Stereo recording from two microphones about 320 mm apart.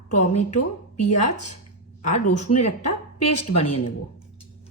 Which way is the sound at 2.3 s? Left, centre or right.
Left.